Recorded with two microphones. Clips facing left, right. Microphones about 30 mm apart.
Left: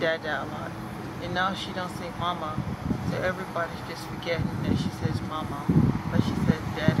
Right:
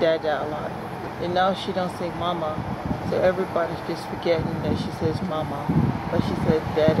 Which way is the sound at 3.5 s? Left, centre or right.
Centre.